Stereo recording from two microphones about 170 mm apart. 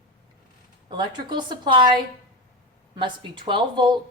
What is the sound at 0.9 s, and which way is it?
A woman's voice, 25° right (ahead or behind).